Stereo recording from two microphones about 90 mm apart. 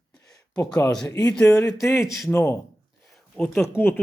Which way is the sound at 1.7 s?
35° left (ahead or behind).